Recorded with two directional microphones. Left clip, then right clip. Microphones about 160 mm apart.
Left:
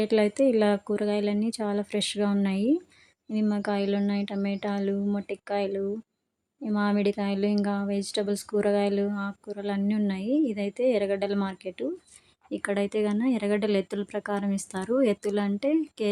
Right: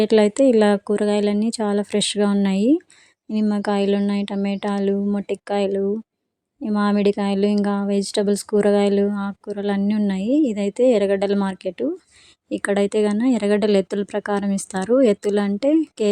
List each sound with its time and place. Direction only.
0.0 s speech: 40° right (ahead or behind)